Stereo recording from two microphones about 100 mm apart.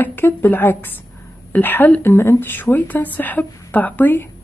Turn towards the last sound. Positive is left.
turn(degrees=20)  # may be behind; listen again after turning